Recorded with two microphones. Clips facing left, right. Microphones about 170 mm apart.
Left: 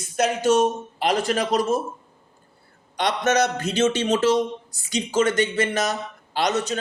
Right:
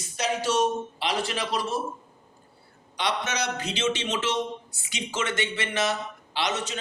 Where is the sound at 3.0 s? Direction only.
45° left (ahead or behind).